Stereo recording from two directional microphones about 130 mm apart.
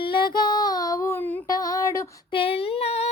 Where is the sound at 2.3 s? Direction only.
45° left (ahead or behind).